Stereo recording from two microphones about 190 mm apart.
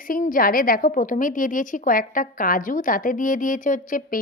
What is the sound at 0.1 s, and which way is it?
A woman's voice, 45° left (ahead or behind).